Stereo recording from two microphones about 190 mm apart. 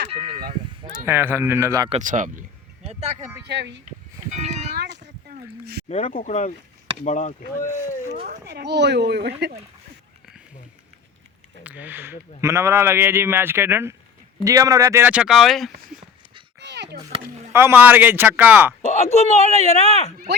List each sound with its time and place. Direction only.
0.1 s a man's voice: 25° right (ahead or behind)
1.9 s speech: 40° right (ahead or behind)
2.8 s a sound: 35° right (ahead or behind)
3.4 s speech: 65° right (ahead or behind)
4.3 s a sound: 35° right (ahead or behind)
4.7 s a sound: 60° right (ahead or behind)
5.9 s speech: 40° left (ahead or behind)
8.4 s speech: 60° right (ahead or behind)
11.6 s a man's voice: 10° right (ahead or behind)
16.6 s a sound: 65° right (ahead or behind)
17.5 s a man's voice: 15° right (ahead or behind)
18.8 s speech: 35° left (ahead or behind)